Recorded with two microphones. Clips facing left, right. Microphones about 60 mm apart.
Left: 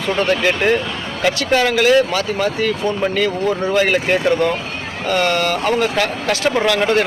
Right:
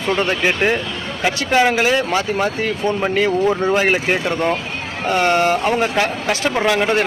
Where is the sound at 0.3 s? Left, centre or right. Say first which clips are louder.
Left 2 dB; centre.